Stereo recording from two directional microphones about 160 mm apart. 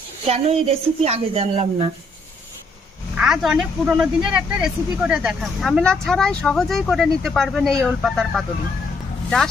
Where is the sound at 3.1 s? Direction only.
5° right (ahead or behind).